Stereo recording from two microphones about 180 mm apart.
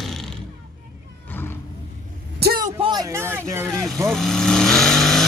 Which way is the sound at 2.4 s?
55° right (ahead or behind).